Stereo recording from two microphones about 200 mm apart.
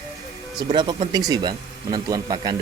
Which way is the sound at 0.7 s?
25° right (ahead or behind).